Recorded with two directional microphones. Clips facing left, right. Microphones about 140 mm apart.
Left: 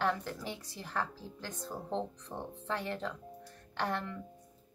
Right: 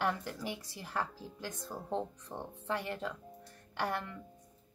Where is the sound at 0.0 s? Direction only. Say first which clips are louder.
Left 1 dB; 10° right (ahead or behind).